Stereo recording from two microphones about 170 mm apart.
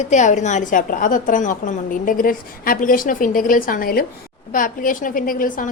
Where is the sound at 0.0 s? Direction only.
45° left (ahead or behind).